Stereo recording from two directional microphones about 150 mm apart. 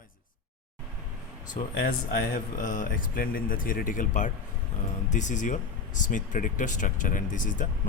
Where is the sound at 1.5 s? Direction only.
75° left (ahead or behind).